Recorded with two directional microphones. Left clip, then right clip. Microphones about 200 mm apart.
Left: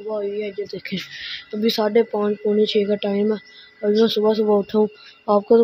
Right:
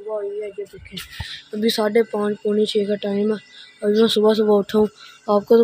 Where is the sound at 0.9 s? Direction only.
25° left (ahead or behind).